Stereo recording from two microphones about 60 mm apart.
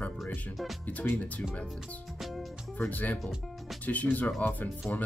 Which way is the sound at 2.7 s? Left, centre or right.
Left.